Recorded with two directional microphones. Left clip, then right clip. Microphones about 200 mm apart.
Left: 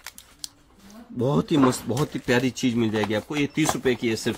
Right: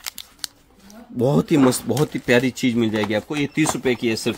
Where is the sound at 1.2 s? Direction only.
30° right (ahead or behind).